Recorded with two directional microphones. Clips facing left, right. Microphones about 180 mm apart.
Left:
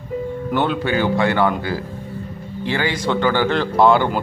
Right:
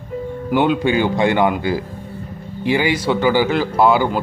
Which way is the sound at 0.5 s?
15° right (ahead or behind).